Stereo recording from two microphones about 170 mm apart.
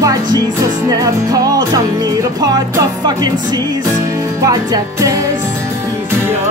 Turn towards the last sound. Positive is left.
turn(degrees=-20)  # may be behind; listen again after turning